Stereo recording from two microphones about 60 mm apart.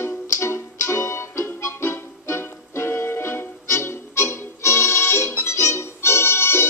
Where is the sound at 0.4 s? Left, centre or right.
Left.